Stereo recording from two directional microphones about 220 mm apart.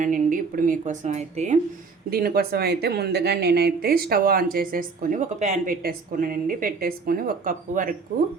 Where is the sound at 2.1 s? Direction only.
45° right (ahead or behind).